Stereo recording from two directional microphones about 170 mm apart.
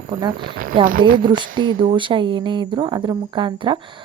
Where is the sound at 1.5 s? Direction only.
30° right (ahead or behind).